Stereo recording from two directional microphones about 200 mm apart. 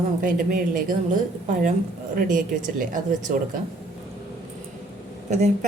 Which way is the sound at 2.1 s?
40° right (ahead or behind).